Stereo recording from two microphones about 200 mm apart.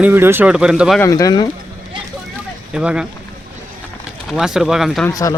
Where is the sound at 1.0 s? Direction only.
15° left (ahead or behind).